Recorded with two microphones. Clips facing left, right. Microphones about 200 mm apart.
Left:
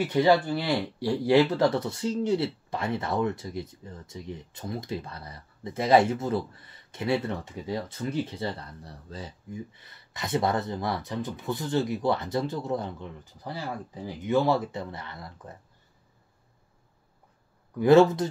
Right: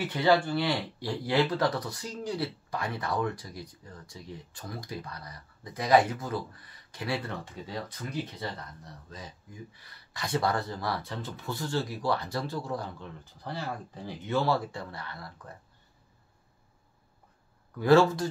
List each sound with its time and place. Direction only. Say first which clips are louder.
0.1 s speech: left 2 dB; 20° left (ahead or behind)
17.7 s speech: left 4 dB; 20° left (ahead or behind)